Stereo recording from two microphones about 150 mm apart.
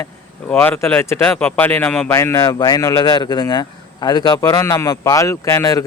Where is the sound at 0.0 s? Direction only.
15° left (ahead or behind).